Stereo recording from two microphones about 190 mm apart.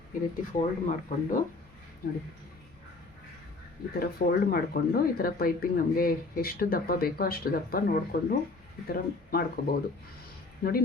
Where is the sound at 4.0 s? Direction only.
50° left (ahead or behind).